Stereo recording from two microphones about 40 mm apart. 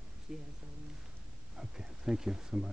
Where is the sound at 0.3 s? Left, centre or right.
Centre.